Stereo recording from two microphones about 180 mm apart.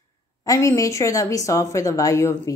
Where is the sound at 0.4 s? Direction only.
15° left (ahead or behind).